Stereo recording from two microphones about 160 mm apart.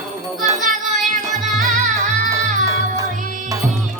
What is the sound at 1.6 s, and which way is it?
Music, 50° right (ahead or behind).